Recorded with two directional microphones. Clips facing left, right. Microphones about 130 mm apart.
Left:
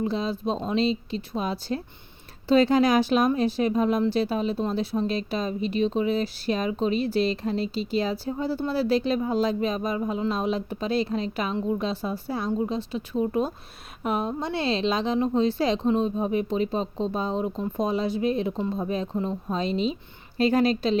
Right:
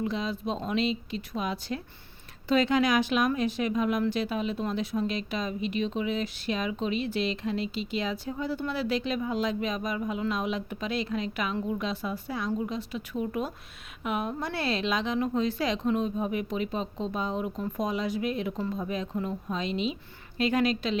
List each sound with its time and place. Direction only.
0.0 s speech: 30° left (ahead or behind)